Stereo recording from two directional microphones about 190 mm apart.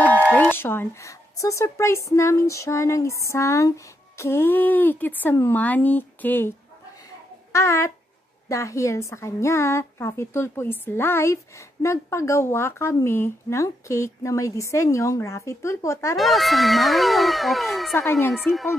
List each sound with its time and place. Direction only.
0.3 s a woman's voice: 10° left (ahead or behind)
7.5 s a woman's voice: 15° left (ahead or behind)
16.2 s a woman's voice: centre (ahead or behind)